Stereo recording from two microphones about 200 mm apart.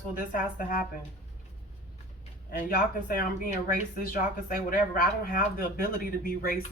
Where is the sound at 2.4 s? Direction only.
45° left (ahead or behind).